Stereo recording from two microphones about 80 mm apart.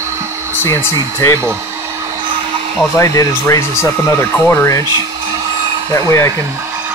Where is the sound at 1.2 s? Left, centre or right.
Left.